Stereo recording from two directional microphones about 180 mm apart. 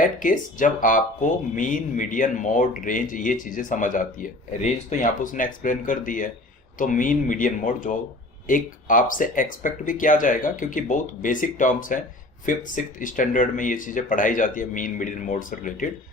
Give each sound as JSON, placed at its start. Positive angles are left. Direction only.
{"t": 0.2, "sound": "speech", "side_deg": 45}